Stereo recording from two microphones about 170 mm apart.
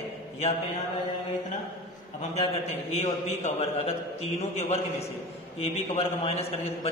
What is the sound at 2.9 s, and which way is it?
A man's voice, 40° left (ahead or behind).